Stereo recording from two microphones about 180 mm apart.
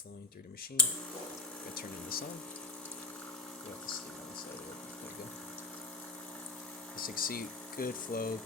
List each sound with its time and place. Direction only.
1.7 s speech: 55° left (ahead or behind)
7.0 s speech: 55° left (ahead or behind)